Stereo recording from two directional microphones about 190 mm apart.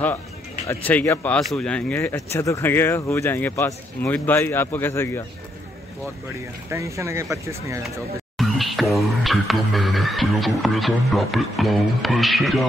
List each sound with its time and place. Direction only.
0.7 s speech: 10° left (ahead or behind)
6.7 s speech: 15° right (ahead or behind)
8.4 s speech: centre (ahead or behind)